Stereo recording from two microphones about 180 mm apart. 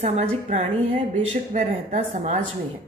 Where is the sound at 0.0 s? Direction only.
35° right (ahead or behind).